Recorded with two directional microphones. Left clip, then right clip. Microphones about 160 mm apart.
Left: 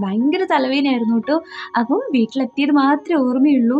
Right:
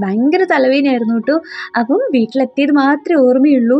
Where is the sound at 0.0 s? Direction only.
25° right (ahead or behind).